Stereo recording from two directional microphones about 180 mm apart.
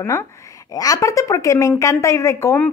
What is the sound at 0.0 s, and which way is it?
A woman's voice, 15° left (ahead or behind).